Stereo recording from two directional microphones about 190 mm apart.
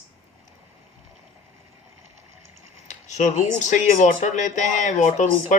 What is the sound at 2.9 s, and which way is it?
Speech, 40° left (ahead or behind).